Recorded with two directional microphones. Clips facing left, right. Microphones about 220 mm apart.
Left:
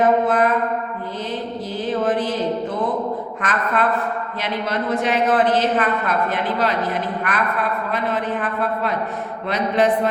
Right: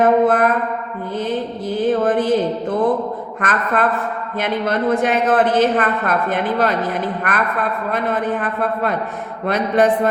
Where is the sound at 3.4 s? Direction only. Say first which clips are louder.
Right 3 dB; 50° right (ahead or behind).